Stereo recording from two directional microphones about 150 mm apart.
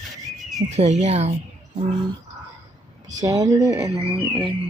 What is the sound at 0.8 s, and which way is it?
Speech, 45° right (ahead or behind).